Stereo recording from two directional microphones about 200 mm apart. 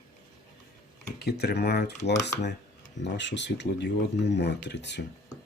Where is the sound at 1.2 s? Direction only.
55° left (ahead or behind).